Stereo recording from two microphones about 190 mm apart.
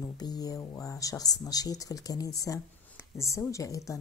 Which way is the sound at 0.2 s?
20° left (ahead or behind).